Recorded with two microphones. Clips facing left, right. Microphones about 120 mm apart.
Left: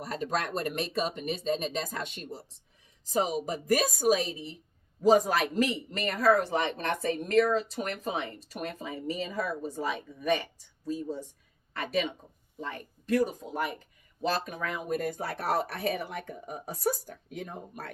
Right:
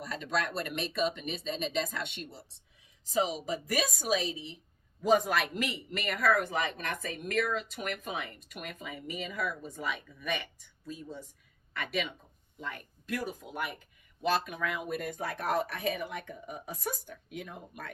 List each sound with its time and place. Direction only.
0.0 s speech: 40° left (ahead or behind)